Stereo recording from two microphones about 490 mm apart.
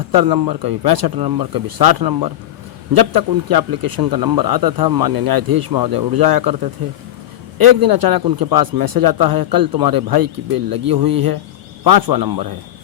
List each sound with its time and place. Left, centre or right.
0.1 s speech: right
7.8 s speech: right